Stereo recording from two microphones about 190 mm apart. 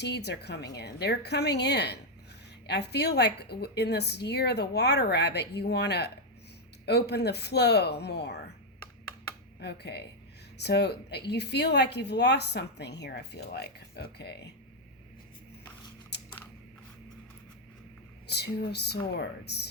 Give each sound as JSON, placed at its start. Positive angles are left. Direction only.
{"t": 0.0, "sound": "a woman's voice", "side_deg": 60}
{"t": 9.6, "sound": "a woman's voice", "side_deg": 60}
{"t": 16.1, "sound": "biting", "side_deg": 65}
{"t": 18.3, "sound": "a woman's voice", "side_deg": 60}